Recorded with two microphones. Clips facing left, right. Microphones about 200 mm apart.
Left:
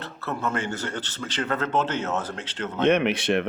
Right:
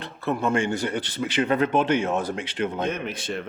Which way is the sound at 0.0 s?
15° right (ahead or behind).